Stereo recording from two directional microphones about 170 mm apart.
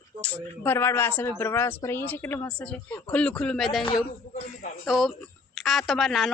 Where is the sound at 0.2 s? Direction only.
5° left (ahead or behind).